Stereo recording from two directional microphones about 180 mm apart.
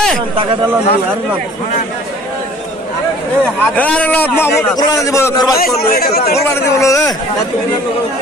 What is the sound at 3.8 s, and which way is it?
A man's voice, 10° left (ahead or behind).